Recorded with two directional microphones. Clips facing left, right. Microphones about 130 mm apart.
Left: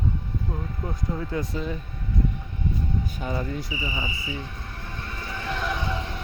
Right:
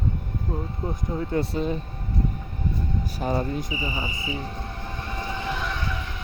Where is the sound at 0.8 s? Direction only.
30° right (ahead or behind).